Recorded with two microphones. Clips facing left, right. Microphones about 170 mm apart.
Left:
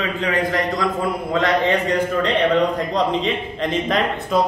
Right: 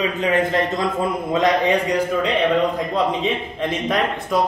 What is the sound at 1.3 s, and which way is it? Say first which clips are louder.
A man's voice: right 1 dB; 15° right (ahead or behind).